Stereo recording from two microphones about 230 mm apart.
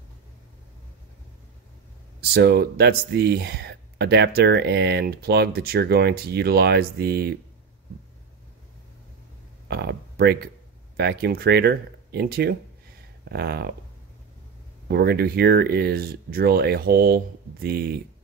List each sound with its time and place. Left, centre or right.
2.3 s speech: right
9.7 s a sound: right
11.0 s speech: right
14.9 s speech: right